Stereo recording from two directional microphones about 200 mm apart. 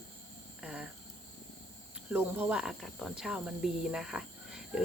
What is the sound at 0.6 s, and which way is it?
Speech, 5° right (ahead or behind).